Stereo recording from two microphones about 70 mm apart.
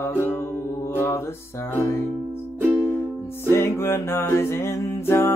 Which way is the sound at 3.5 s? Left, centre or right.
Left.